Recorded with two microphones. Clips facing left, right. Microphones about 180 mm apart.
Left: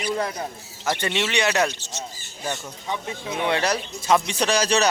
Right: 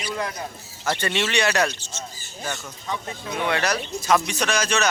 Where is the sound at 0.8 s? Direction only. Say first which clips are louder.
Even; 15° left (ahead or behind).